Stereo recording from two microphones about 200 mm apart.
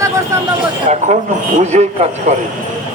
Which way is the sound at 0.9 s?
35° right (ahead or behind).